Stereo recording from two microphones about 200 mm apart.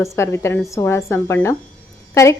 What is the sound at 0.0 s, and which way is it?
Speech, 15° left (ahead or behind).